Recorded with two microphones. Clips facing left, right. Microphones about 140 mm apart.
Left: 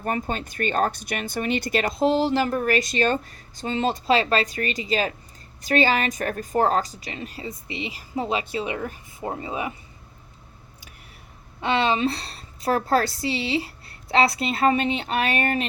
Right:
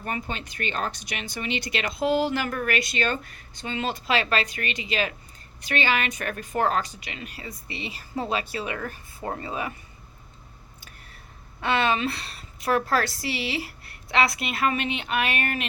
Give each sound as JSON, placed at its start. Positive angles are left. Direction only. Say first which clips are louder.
{"t": 0.0, "sound": "speech", "louder": "left 5 dB", "side_deg": 40}
{"t": 10.8, "sound": "a sound", "louder": "even", "side_deg": 15}
{"t": 11.6, "sound": "speech", "louder": "left 2 dB", "side_deg": 25}